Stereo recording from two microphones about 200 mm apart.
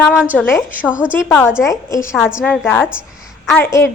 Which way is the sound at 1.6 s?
15° left (ahead or behind).